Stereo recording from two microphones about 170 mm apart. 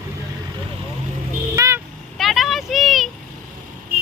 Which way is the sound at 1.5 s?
20° right (ahead or behind).